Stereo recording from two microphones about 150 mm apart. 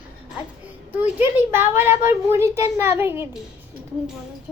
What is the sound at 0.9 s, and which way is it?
A woman's voice, 10° right (ahead or behind).